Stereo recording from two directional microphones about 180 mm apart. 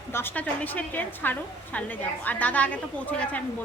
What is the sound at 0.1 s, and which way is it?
A woman's voice, 10° left (ahead or behind).